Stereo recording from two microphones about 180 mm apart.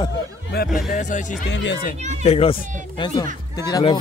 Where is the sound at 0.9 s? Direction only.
45° left (ahead or behind).